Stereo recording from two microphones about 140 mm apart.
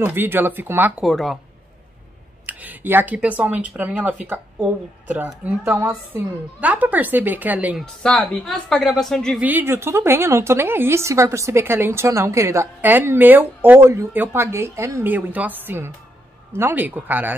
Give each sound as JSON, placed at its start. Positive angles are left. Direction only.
{"t": 0.0, "sound": "a woman's voice", "side_deg": -15}
{"t": 1.0, "sound": "a woman's voice", "side_deg": 0}
{"t": 2.4, "sound": "a woman's voice", "side_deg": -15}
{"t": 7.8, "sound": "a woman's voice", "side_deg": 5}
{"t": 9.4, "sound": "a woman's voice", "side_deg": -15}